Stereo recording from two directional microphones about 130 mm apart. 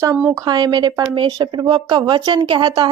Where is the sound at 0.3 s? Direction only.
30° right (ahead or behind).